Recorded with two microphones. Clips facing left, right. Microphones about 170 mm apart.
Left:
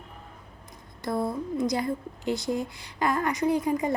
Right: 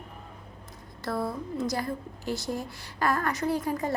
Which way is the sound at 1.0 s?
20° left (ahead or behind).